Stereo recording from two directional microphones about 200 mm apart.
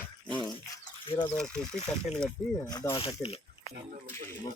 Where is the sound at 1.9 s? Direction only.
5° left (ahead or behind).